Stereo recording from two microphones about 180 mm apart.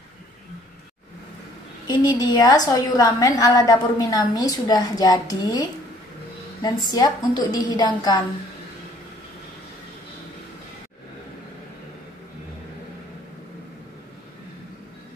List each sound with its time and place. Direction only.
1.9 s a woman's voice: 20° left (ahead or behind)